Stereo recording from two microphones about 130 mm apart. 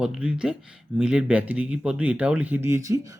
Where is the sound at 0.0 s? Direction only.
5° right (ahead or behind).